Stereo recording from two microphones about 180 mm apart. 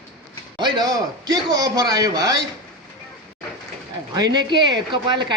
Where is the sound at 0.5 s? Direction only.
25° right (ahead or behind).